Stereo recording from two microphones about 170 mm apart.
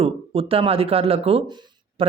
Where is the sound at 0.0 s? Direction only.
35° right (ahead or behind).